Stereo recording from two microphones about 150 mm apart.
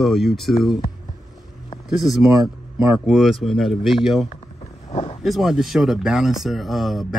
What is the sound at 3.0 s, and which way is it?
Speech, centre (ahead or behind).